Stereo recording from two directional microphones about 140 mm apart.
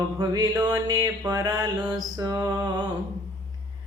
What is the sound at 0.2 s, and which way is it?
Mantra, 25° right (ahead or behind).